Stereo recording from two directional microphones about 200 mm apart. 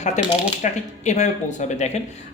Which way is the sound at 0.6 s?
35° left (ahead or behind).